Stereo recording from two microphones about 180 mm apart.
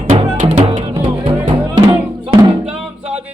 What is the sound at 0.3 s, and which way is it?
Music, 35° right (ahead or behind).